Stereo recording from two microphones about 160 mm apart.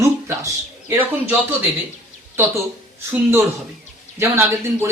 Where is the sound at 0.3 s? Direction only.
15° right (ahead or behind).